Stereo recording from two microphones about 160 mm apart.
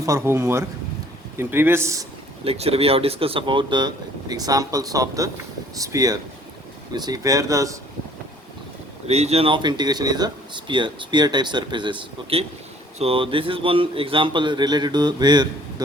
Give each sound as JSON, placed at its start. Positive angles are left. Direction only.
{"t": 0.0, "sound": "a man's voice", "side_deg": -20}
{"t": 2.4, "sound": "speech", "side_deg": -40}
{"t": 9.0, "sound": "speech", "side_deg": -40}